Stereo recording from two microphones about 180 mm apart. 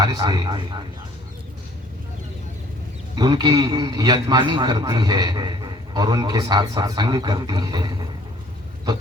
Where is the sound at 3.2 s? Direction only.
25° right (ahead or behind).